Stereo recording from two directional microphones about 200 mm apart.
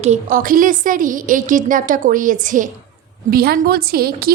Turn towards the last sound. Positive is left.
turn(degrees=-50)  # may be behind; listen again after turning